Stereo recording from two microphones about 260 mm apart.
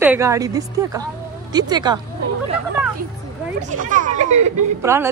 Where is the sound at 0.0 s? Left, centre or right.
Centre.